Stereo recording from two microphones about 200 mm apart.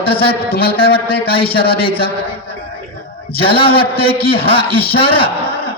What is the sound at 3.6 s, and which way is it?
A man's voice, 25° left (ahead or behind).